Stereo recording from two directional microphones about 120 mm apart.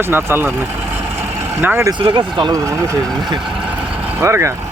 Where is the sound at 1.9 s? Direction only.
45° right (ahead or behind).